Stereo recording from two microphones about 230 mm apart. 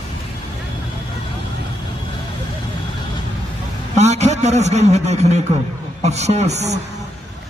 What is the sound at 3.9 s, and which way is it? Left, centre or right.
A man's voice, right.